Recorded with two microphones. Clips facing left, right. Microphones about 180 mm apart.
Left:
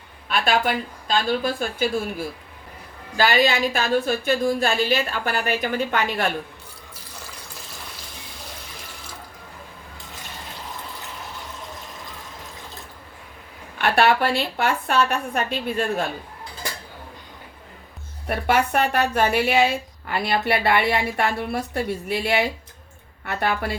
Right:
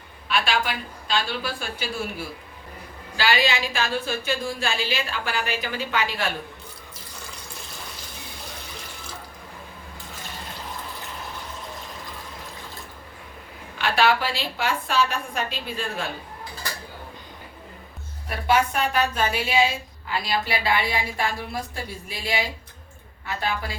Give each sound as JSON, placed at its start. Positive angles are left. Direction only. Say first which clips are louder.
{"t": 0.3, "sound": "a woman's voice", "louder": "left 4 dB", "side_deg": 45}
{"t": 3.2, "sound": "a woman's voice", "louder": "left 4 dB", "side_deg": 45}
{"t": 13.8, "sound": "speech", "louder": "left 3 dB", "side_deg": 60}
{"t": 18.3, "sound": "speech", "louder": "left 1 dB", "side_deg": 60}